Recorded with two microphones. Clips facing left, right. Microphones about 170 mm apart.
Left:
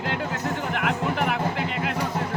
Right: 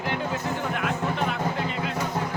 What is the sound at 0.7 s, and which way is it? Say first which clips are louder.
Music: left 2 dB; 70° left (ahead or behind).